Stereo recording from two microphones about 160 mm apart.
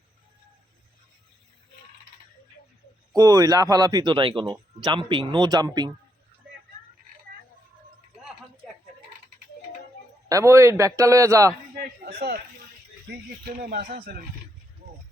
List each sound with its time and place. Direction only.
3.2 s speech: 20° right (ahead or behind)
10.2 s speech: 20° right (ahead or behind)
11.8 s chop: 80° right
13.6 s speech: 75° right (ahead or behind); by 14.1 s 60° right (ahead or behind)